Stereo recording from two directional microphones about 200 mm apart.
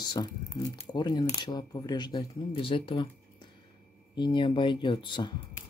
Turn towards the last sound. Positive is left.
turn(degrees=25)  # may be behind; listen again after turning